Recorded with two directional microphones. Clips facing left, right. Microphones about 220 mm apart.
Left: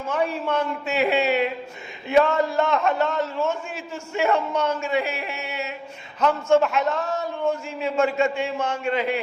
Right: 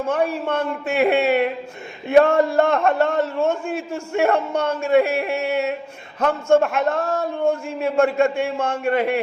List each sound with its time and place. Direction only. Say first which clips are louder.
0.1 s a man's voice: right 1 dB; 55° right (ahead or behind)